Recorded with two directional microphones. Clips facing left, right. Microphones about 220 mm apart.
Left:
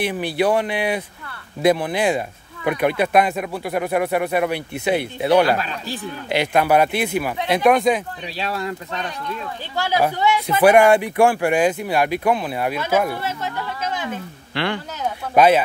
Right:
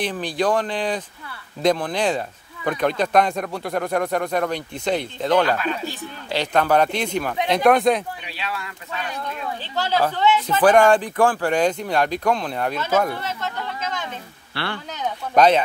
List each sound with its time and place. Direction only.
0.0 s speech: 10° left (ahead or behind)
8.4 s speech: 40° left (ahead or behind)
9.8 s speech: 10° left (ahead or behind)
14.5 s speech: 15° left (ahead or behind)